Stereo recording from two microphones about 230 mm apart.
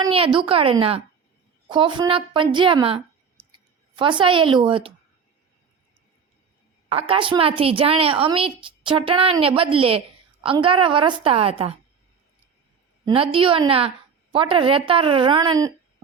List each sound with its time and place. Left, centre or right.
0.0 s a woman's voice: right
6.8 s a woman's voice: right
13.1 s a woman's voice: right